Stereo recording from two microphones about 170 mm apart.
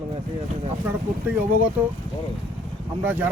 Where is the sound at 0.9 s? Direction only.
10° right (ahead or behind).